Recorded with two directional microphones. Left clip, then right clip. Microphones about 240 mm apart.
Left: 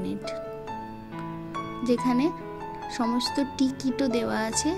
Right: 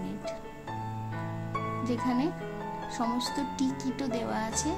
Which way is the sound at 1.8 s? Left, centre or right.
Centre.